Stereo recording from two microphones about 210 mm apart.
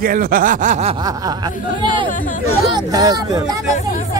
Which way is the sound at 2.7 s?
20° right (ahead or behind).